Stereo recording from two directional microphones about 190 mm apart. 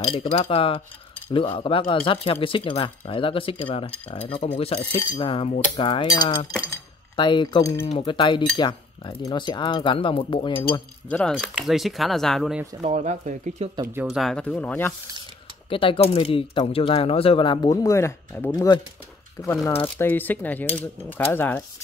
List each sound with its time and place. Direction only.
0.0 s speech: 25° left (ahead or behind)
11.1 s speech: 5° left (ahead or behind)
12.8 s speech: 40° right (ahead or behind)
14.0 s speech: centre (ahead or behind)
15.7 s speech: 30° left (ahead or behind); by 18.5 s 10° left (ahead or behind)
18.5 s speech: 25° left (ahead or behind)